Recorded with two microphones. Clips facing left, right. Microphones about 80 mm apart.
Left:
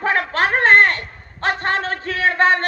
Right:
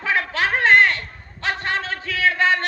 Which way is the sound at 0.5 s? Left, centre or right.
Left.